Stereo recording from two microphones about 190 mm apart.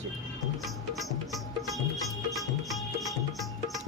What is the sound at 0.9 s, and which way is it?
Music, centre (ahead or behind).